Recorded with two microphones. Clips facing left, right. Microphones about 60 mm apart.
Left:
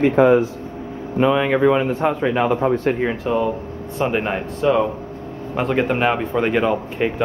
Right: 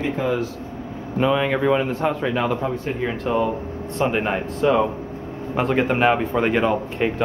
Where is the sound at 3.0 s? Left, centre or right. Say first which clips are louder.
Left 2 dB; centre.